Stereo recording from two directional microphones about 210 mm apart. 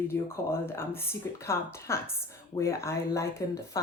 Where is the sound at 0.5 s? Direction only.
10° left (ahead or behind).